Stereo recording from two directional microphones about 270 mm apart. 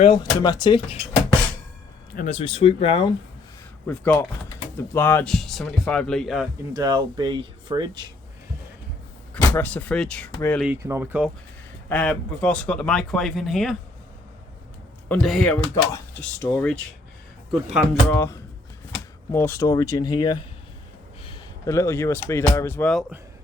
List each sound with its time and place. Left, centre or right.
0.0 s speech: centre
2.1 s speech: left
3.8 s speech: centre
6.7 s speech: centre
9.3 s speech: centre
10.7 s speech: centre
11.9 s speech: centre
15.1 s speech: centre